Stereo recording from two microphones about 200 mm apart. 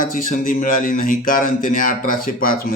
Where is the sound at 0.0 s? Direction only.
40° left (ahead or behind).